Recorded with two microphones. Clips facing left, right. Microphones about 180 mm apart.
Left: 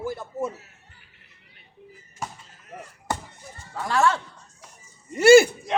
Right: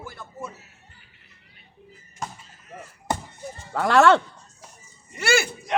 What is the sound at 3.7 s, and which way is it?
Speech, 70° right (ahead or behind).